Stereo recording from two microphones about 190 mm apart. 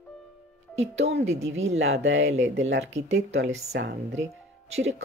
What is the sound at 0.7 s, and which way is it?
Speech, 35° right (ahead or behind).